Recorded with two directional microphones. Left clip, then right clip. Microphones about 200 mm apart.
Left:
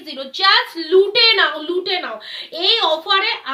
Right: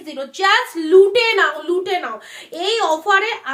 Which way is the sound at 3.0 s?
45° right (ahead or behind).